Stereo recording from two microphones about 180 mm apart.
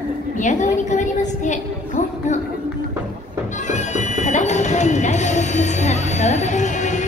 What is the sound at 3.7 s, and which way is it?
Bagpipes, 40° left (ahead or behind).